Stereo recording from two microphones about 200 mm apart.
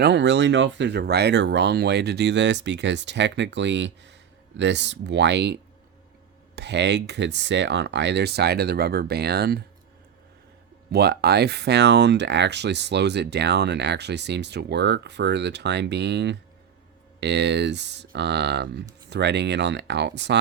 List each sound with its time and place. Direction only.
0.0 s speech: 60° right (ahead or behind)
6.6 s speech: 60° right (ahead or behind)
10.9 s speech: 55° right (ahead or behind)